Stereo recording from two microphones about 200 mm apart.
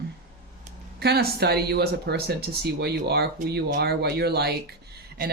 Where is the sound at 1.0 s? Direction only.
55° right (ahead or behind).